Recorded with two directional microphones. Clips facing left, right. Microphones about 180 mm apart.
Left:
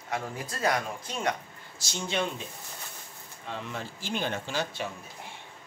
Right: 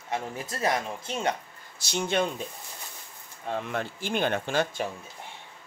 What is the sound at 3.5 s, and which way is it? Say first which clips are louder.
Speech: right 6 dB; 55° right (ahead or behind).